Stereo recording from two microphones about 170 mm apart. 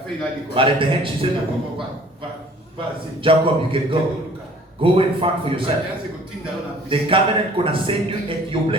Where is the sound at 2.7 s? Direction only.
30° right (ahead or behind).